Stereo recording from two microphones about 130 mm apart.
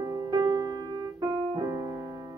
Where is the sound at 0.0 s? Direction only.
30° right (ahead or behind).